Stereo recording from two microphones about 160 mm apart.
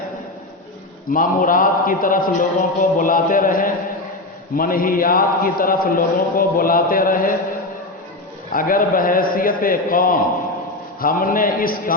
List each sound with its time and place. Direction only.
1.1 s music: 60° left (ahead or behind)
8.5 s music: 60° left (ahead or behind)